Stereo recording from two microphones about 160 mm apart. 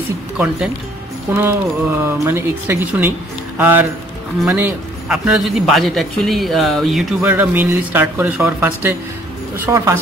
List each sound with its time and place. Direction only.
1.3 s a man's voice: 15° right (ahead or behind)
7.2 s a woman's voice: 10° right (ahead or behind)